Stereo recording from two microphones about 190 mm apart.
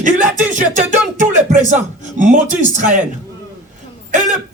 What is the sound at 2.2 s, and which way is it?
Speech, 40° right (ahead or behind).